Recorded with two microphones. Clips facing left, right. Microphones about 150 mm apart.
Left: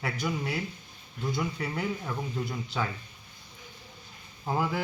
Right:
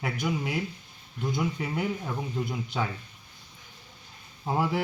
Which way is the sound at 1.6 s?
10° right (ahead or behind).